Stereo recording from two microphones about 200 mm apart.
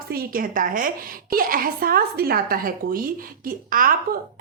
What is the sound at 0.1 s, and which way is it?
A woman's voice, 45° right (ahead or behind).